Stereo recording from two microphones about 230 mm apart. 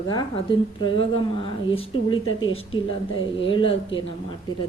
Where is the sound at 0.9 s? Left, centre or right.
Left.